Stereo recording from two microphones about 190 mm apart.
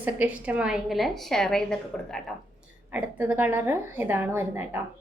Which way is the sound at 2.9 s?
10° right (ahead or behind).